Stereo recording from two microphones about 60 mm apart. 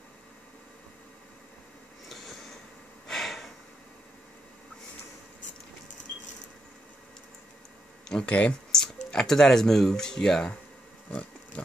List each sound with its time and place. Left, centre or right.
2.0 s a sound: centre
8.1 s speech: centre
8.7 s speech: centre
11.1 s pig: left